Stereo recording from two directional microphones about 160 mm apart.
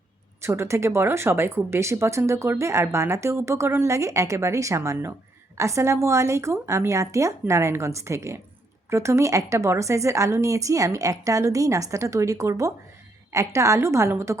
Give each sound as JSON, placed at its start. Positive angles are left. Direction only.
{"t": 0.4, "sound": "a woman's voice", "side_deg": -15}